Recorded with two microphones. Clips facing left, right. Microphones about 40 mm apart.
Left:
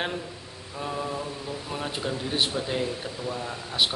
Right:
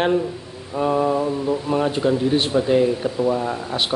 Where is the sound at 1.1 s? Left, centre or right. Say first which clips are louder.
Right 12 dB; right.